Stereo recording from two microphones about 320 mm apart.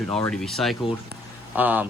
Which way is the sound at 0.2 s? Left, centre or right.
Centre.